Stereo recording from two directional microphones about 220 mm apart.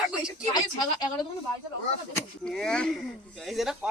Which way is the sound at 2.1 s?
5° left (ahead or behind).